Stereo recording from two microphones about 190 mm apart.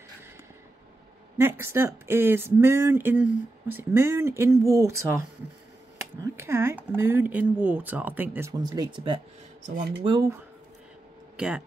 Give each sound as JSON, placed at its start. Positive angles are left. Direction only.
{"t": 1.4, "sound": "speech", "side_deg": -15}
{"t": 9.6, "sound": "speech", "side_deg": -45}
{"t": 10.0, "sound": "speech", "side_deg": -25}
{"t": 11.3, "sound": "speech", "side_deg": -5}